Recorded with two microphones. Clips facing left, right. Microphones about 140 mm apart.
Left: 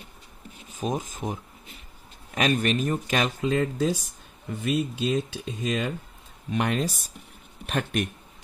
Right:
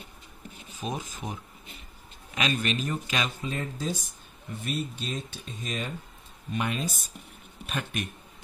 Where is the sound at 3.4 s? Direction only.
90° left.